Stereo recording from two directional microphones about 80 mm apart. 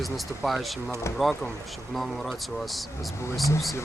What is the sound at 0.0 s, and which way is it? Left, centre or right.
Speech, centre.